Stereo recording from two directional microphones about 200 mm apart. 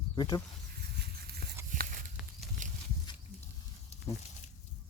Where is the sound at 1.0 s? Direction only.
50° right (ahead or behind).